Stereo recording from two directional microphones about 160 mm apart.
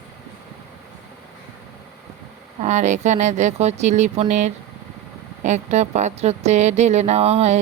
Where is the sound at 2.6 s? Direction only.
45° right (ahead or behind).